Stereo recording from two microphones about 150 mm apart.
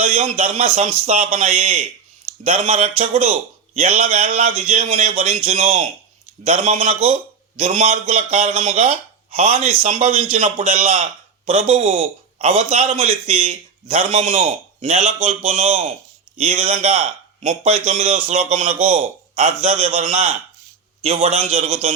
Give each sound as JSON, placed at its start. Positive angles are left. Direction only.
{"t": 0.0, "sound": "a man's voice", "side_deg": -45}